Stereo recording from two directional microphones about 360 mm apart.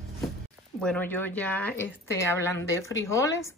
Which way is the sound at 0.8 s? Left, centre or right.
Centre.